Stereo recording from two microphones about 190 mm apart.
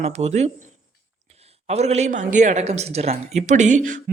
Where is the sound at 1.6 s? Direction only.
35° right (ahead or behind).